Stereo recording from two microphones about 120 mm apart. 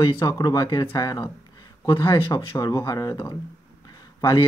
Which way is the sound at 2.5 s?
30° left (ahead or behind).